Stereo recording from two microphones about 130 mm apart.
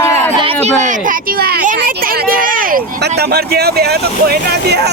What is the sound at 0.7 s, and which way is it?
Speech, 85° right.